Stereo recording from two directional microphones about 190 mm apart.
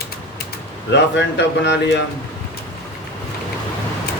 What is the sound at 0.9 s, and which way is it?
A man's voice, 65° left (ahead or behind).